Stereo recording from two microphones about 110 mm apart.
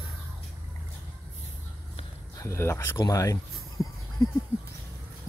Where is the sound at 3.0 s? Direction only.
30° left (ahead or behind).